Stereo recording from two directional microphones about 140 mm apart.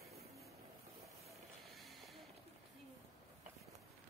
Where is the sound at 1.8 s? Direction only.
Centre (ahead or behind).